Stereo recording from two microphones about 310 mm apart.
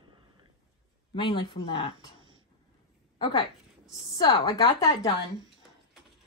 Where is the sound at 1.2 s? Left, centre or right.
Centre.